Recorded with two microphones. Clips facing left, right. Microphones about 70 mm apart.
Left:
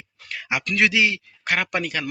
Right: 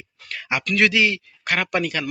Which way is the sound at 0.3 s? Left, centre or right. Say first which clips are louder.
Right 1 dB; centre.